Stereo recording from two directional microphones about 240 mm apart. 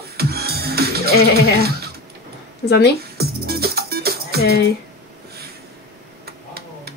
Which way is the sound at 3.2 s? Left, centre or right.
Right.